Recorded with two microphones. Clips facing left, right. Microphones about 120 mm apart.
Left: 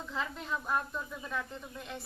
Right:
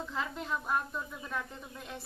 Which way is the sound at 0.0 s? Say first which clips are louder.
Right 1 dB; 5° right (ahead or behind).